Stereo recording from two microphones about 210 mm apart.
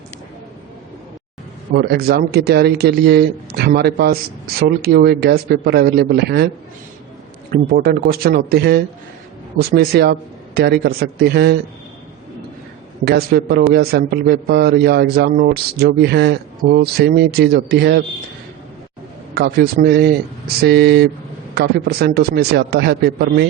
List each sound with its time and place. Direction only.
1.7 s a man's voice: 50° right (ahead or behind)
7.5 s a man's voice: 45° right (ahead or behind)
13.1 s a man's voice: 45° right (ahead or behind)
19.3 s a man's voice: 50° right (ahead or behind)